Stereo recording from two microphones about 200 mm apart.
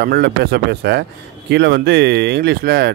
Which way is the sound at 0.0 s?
50° right (ahead or behind).